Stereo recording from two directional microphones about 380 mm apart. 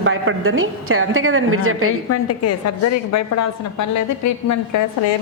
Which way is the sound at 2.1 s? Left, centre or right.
Left.